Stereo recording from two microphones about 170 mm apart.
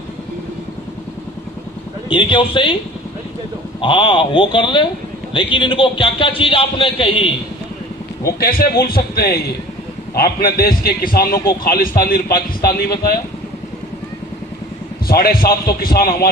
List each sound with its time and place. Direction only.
2.0 s a man's voice: 30° left (ahead or behind)
3.8 s a man's voice: 30° left (ahead or behind)
8.4 s a man's voice: 60° left (ahead or behind)
15.0 s a man's voice: 60° left (ahead or behind)